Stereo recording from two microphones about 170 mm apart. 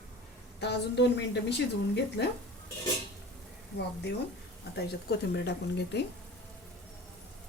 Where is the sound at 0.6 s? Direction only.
85° left.